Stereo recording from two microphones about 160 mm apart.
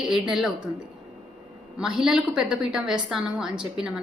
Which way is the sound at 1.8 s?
5° right (ahead or behind).